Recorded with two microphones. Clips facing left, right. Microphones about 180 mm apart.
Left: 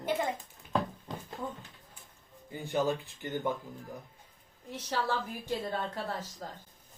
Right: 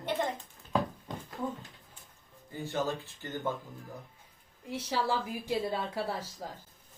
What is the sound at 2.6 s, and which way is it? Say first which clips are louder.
Speech: left 3 dB; 15° left (ahead or behind).